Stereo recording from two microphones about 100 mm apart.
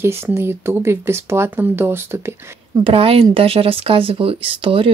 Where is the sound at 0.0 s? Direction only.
25° right (ahead or behind).